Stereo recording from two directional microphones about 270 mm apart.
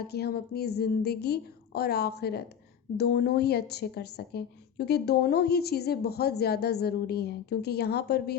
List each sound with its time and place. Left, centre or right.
0.0 s a woman's voice: left